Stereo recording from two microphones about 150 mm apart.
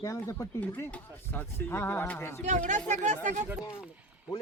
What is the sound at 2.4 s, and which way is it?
Speech, 55° right (ahead or behind).